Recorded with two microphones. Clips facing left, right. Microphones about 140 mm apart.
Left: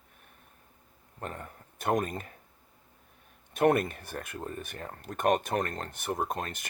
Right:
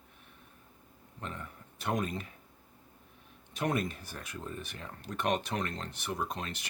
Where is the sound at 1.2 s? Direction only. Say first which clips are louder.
Left 3 dB; 50° left (ahead or behind).